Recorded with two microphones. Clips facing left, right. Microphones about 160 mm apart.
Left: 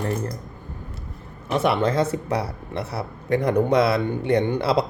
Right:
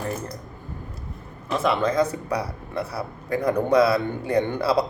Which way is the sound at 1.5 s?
30° left (ahead or behind).